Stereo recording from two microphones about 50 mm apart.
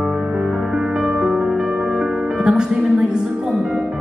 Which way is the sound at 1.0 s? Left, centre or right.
Centre.